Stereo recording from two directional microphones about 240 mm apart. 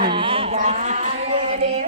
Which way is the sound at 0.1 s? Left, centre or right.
Right.